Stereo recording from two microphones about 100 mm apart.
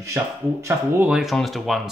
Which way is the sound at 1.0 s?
10° right (ahead or behind).